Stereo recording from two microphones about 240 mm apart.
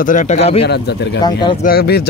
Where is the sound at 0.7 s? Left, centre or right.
Left.